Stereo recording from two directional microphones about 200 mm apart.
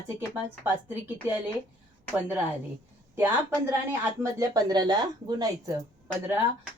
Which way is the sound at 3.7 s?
15° right (ahead or behind).